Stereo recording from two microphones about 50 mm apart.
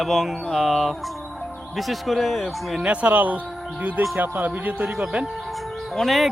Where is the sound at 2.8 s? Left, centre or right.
Right.